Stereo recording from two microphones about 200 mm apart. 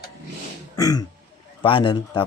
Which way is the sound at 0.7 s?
20° left (ahead or behind).